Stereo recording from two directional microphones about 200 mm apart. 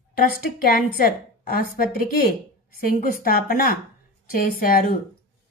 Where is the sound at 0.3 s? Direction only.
45° left (ahead or behind).